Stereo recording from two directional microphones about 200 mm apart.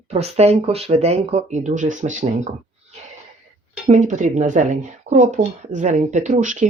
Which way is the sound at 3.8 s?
35° right (ahead or behind).